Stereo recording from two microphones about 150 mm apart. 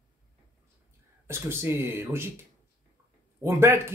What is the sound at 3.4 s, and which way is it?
Speech, 15° right (ahead or behind).